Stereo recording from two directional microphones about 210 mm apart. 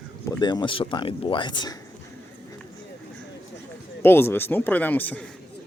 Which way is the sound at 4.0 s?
10° left (ahead or behind).